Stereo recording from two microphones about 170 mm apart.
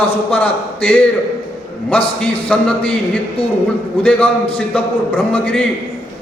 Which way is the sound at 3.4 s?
30° left (ahead or behind).